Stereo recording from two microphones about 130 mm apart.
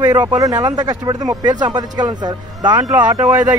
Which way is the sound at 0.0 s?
35° right (ahead or behind).